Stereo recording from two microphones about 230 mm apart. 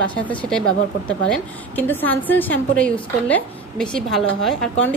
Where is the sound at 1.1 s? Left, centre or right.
Centre.